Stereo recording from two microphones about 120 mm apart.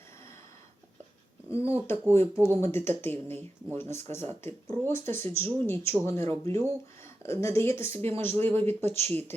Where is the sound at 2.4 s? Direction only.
20° left (ahead or behind).